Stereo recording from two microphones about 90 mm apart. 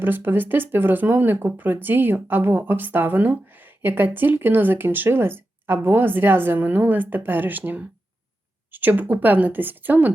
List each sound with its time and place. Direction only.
0.0 s speech: 25° right (ahead or behind)